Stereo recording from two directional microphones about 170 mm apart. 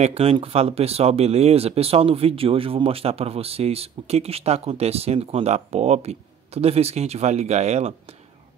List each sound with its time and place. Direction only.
0.0 s speech: 35° right (ahead or behind)